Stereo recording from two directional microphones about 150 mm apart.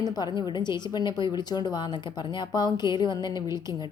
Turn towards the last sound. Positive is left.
turn(degrees=30)  # may be behind; listen again after turning